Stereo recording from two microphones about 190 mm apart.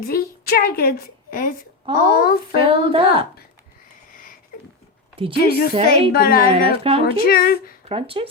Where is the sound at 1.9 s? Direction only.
25° right (ahead or behind).